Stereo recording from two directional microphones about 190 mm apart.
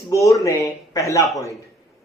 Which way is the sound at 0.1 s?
15° left (ahead or behind).